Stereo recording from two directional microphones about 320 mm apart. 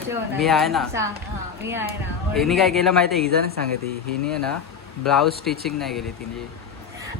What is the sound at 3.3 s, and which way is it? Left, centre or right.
Speech, right.